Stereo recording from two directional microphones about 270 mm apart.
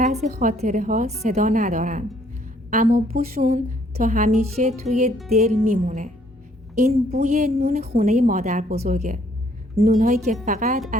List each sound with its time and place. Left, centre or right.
0.0 s a woman's voice: right